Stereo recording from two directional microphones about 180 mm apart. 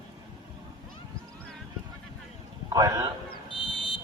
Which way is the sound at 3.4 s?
30° left (ahead or behind).